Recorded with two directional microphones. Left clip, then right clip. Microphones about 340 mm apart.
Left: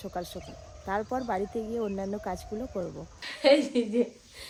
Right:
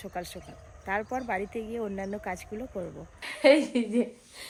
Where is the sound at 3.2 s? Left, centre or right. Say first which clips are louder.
Right 1 dB; centre.